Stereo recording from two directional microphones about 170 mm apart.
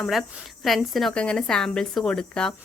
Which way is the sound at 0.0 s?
Centre (ahead or behind).